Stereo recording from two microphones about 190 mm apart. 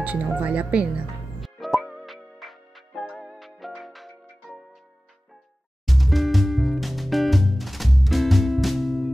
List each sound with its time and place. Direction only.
0.0 s music: 5° right (ahead or behind)
5.9 s music: centre (ahead or behind)